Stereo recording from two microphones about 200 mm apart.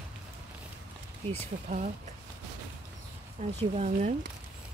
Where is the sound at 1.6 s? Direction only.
40° right (ahead or behind).